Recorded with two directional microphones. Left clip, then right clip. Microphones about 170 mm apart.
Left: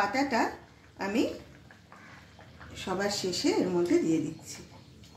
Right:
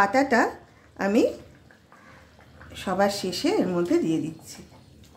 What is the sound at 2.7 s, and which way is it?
Speech, 50° right (ahead or behind).